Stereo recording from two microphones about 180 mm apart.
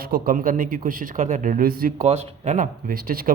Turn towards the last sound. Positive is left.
turn(degrees=-55)  # may be behind; listen again after turning